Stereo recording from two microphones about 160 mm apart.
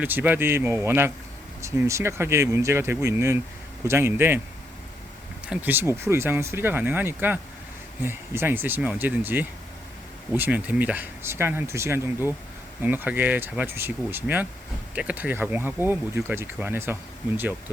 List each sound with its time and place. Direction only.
0.0 s speech: 10° right (ahead or behind)
5.5 s speech: 10° right (ahead or behind)